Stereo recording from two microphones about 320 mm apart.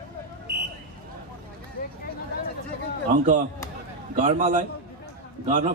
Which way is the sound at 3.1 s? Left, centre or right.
Right.